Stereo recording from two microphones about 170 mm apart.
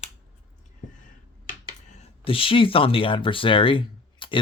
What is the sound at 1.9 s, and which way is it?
Speech, 35° left (ahead or behind).